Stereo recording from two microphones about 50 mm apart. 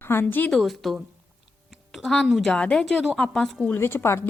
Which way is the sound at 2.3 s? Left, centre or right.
Centre.